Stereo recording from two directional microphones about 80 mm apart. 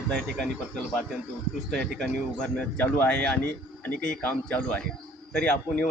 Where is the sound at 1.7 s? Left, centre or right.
Centre.